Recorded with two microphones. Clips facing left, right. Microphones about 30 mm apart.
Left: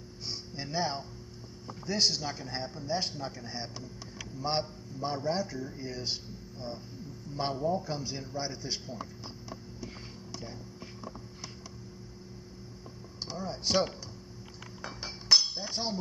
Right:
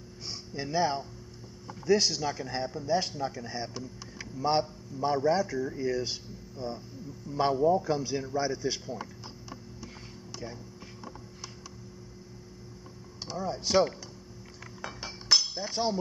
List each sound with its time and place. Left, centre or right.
0.6 s speech: centre
7.3 s speech: centre
13.3 s speech: centre
14.8 s chink: centre
15.7 s speech: centre